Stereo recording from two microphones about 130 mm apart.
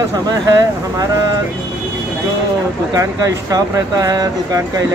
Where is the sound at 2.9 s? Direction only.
30° right (ahead or behind).